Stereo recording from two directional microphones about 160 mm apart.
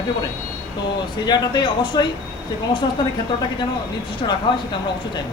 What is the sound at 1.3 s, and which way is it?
Speech, 30° left (ahead or behind).